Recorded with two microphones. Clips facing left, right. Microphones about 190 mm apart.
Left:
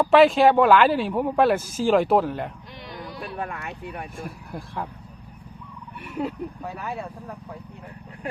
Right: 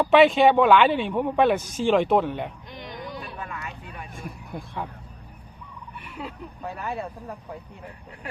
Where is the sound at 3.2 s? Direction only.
60° left (ahead or behind).